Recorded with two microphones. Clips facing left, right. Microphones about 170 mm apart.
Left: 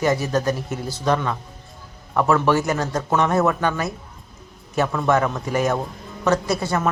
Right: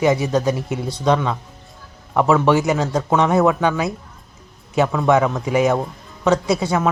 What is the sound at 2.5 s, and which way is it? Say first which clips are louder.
Speech: right 3 dB; 20° right (ahead or behind).